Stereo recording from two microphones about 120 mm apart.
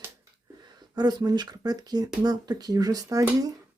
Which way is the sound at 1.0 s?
35° right (ahead or behind).